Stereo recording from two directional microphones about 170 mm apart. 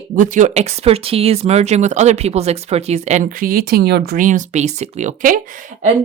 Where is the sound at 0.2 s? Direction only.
50° right (ahead or behind).